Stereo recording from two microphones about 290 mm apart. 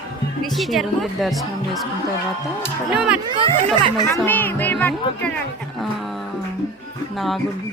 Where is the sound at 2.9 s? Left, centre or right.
Centre.